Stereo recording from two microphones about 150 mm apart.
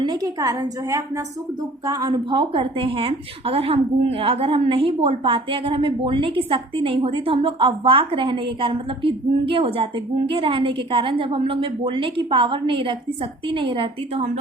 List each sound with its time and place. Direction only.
0.0 s a woman's voice: 30° right (ahead or behind)